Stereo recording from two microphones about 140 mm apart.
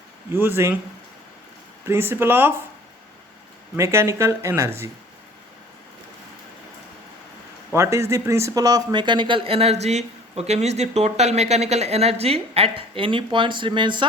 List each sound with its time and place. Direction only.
0.3 s speech: 15° right (ahead or behind)
1.9 s speech: 15° right (ahead or behind)
3.8 s speech: 20° right (ahead or behind)
7.7 s speech: 20° right (ahead or behind)